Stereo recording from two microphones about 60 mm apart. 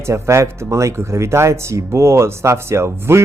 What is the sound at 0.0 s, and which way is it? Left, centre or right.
Speech, right.